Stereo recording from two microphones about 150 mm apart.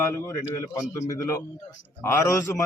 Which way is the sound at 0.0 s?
20° left (ahead or behind).